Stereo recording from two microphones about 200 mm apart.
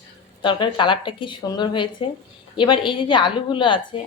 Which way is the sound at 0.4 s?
25° left (ahead or behind).